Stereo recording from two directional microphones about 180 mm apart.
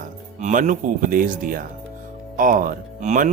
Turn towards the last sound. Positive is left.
turn(degrees=-45)  # may be behind; listen again after turning